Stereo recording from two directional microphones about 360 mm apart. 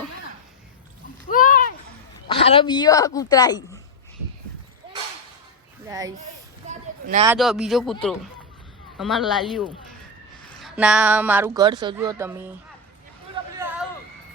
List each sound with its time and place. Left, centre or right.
1.3 s a sound: left
2.2 s speech: centre
5.9 s speech: centre
6.7 s a sound: centre
7.3 s speech: centre
9.0 s speech: centre
13.6 s hubbub: centre